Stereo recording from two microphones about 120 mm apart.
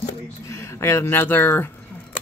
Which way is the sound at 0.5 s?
25° left (ahead or behind).